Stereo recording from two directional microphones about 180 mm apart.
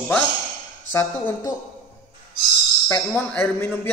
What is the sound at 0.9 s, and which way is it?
Speech, 15° left (ahead or behind).